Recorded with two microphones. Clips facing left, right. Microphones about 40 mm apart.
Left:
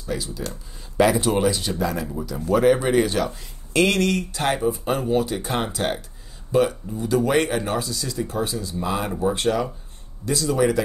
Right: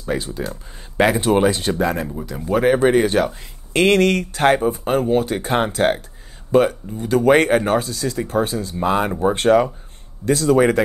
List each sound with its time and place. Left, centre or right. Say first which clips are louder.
0.0 s speech: right 5 dB; right